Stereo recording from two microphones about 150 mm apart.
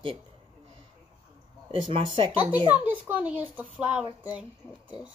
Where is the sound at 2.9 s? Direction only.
10° right (ahead or behind).